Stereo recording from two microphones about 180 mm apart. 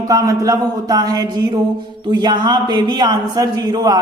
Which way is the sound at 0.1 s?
20° right (ahead or behind).